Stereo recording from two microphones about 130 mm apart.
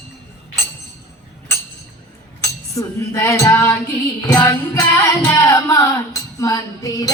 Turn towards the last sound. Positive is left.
turn(degrees=30)  # may be behind; listen again after turning